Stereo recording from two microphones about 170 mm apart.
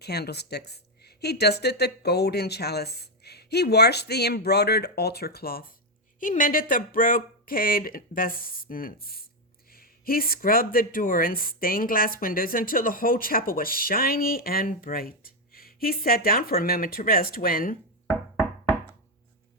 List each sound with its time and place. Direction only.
0.0 s speech: 75° left (ahead or behind); by 17.7 s 55° left (ahead or behind)